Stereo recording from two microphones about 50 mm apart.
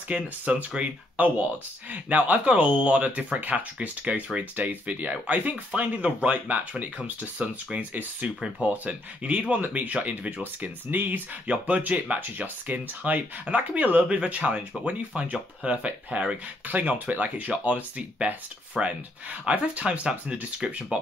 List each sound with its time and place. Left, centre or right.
0.1 s speech: right
10.6 s speech: right
11.4 s speech: right
18.8 s speech: centre
19.4 s speech: right